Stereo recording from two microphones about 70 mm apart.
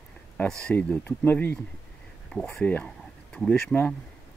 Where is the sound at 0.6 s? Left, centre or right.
Centre.